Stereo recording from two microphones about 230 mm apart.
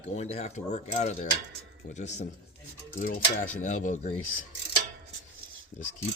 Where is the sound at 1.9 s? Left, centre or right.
Left.